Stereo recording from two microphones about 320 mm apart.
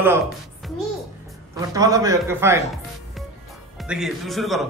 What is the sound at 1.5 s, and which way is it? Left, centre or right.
A man's voice, centre.